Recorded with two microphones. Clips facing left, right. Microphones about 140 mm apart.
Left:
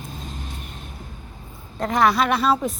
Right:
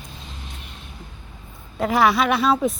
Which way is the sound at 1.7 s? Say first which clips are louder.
Right 1 dB; 5° right (ahead or behind).